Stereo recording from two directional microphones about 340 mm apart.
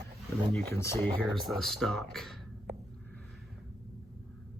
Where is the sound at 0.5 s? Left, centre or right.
Centre.